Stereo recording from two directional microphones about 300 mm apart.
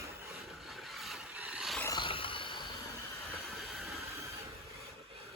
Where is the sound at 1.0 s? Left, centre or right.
Centre.